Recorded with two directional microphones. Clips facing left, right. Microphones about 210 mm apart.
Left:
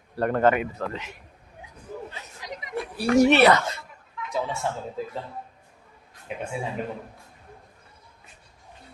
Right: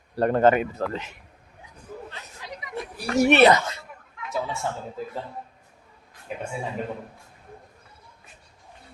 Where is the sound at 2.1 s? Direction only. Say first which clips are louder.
Left 1 dB; 15° left (ahead or behind); by 3.2 s 30° left (ahead or behind).